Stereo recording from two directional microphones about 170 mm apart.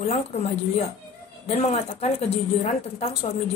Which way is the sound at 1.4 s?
40° left (ahead or behind).